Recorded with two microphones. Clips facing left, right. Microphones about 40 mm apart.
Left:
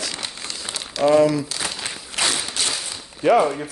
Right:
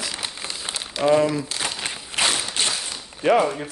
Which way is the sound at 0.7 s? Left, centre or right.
Right.